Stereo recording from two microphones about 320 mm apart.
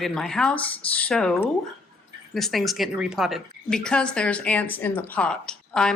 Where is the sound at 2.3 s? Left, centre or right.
Centre.